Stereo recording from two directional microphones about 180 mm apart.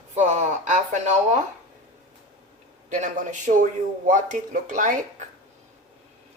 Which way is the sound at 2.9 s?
45° right (ahead or behind).